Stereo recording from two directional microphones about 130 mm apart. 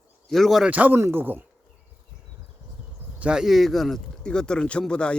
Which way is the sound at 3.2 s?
5° right (ahead or behind).